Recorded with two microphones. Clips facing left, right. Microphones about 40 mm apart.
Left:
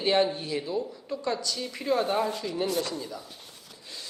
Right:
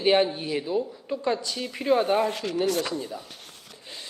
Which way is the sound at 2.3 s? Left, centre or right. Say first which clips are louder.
Right 3 dB; right.